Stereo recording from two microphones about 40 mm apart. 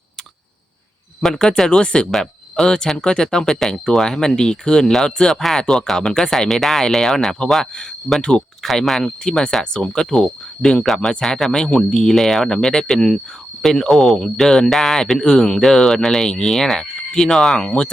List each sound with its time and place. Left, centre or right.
1.2 s speech: centre
2.0 s speech: centre
5.3 s speech: centre
8.1 s speech: right
8.6 s speech: centre
9.7 s speech: left
10.8 s speech: centre
14.4 s speech: centre
15.6 s speech: centre
17.6 s speech: left